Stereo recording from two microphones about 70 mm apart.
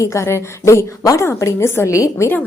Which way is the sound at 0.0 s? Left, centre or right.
Left.